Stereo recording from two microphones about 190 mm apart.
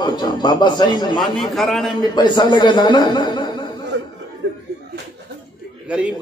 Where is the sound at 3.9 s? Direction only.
70° right (ahead or behind).